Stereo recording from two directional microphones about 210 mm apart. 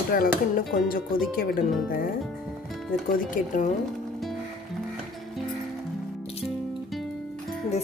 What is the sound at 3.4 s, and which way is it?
Speech, 40° left (ahead or behind).